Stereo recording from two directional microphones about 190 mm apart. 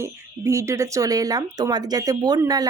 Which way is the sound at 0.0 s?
15° right (ahead or behind).